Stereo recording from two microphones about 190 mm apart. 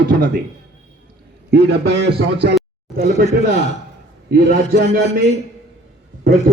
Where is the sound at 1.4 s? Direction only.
60° right (ahead or behind).